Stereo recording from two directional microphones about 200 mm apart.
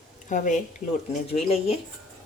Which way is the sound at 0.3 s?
40° left (ahead or behind).